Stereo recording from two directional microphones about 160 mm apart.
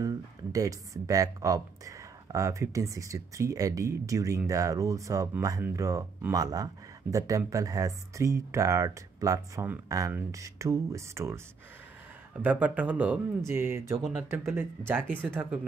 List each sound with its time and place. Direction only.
0.0 s speech: 20° right (ahead or behind)